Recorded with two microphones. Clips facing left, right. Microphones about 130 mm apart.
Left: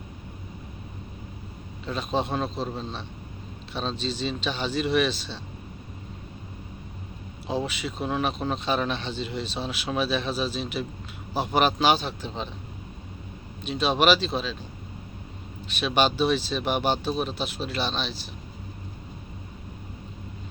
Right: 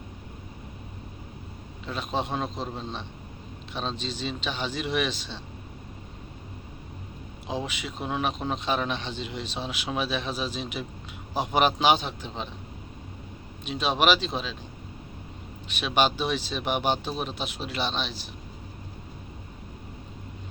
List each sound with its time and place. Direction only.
1.9 s a man's voice: 10° right (ahead or behind)
7.4 s a man's voice: 15° right (ahead or behind)
13.7 s a man's voice: 15° right (ahead or behind)
15.6 s a man's voice: 15° right (ahead or behind)